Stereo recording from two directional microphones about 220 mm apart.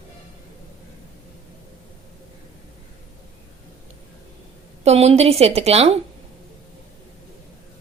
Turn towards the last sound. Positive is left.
turn(degrees=-30)  # may be behind; listen again after turning